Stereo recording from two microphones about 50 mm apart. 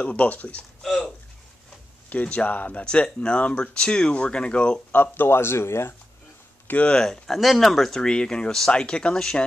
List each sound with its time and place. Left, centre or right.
0.0 s speech: left
2.2 s speech: left
4.9 s speech: left
6.8 s speech: centre
7.2 s speech: centre